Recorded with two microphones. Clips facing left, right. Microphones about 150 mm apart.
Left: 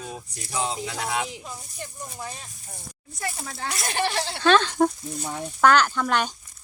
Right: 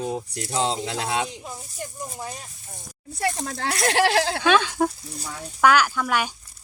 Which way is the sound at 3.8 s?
90° right.